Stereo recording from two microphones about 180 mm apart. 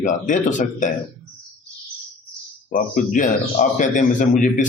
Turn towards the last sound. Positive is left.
turn(degrees=45)  # may be behind; listen again after turning